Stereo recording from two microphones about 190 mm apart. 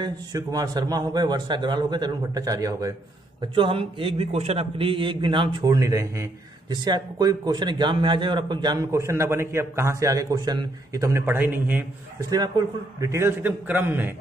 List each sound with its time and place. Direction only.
0.0 s a man's voice: 20° right (ahead or behind)
12.3 s a man's voice: 20° right (ahead or behind)